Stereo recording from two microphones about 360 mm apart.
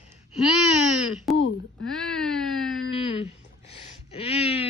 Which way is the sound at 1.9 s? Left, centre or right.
Centre.